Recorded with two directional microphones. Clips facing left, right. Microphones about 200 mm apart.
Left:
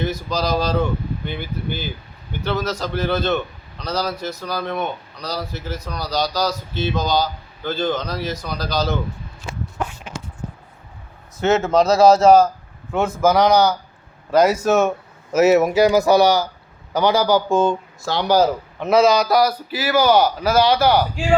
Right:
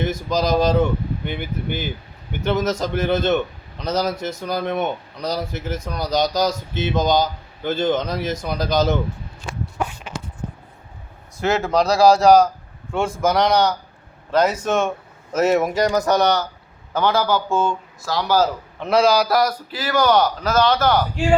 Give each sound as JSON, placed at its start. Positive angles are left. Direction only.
{"t": 0.3, "sound": "speech", "side_deg": -20}
{"t": 9.8, "sound": "a sound", "side_deg": -10}
{"t": 11.3, "sound": "a man's voice", "side_deg": 5}
{"t": 18.8, "sound": "a man's voice", "side_deg": 5}